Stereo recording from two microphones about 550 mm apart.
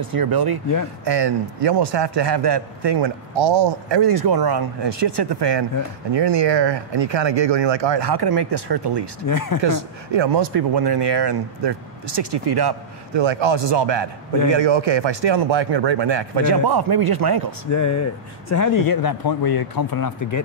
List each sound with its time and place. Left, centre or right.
0.0 s a man's voice: right
9.3 s speech: left
10.1 s a man's voice: right
17.6 s speech: left